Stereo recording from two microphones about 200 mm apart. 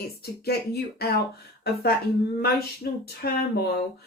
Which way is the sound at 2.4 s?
50° left (ahead or behind).